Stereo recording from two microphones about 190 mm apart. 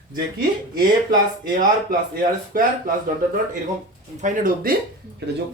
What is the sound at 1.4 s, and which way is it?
A man's voice, 45° right (ahead or behind).